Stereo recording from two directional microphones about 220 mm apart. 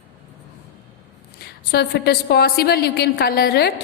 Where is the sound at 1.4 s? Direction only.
45° left (ahead or behind).